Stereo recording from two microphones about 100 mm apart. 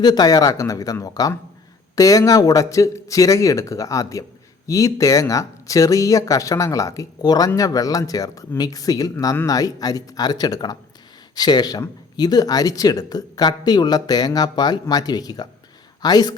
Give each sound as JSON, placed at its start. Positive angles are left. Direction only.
{"t": 0.0, "sound": "speech", "side_deg": 40}